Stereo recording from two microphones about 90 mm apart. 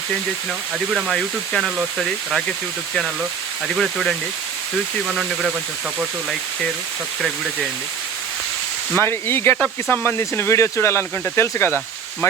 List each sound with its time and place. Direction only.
0.9 s speech: 10° right (ahead or behind)
3.7 s speech: centre (ahead or behind)
5.3 s speech: 5° right (ahead or behind)
7.2 s speech: 5° right (ahead or behind)
9.0 s speech: 25° left (ahead or behind)